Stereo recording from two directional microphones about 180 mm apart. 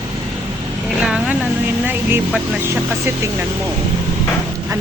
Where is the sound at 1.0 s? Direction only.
5° right (ahead or behind).